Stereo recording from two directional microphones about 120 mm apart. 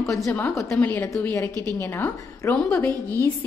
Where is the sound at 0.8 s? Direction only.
15° left (ahead or behind).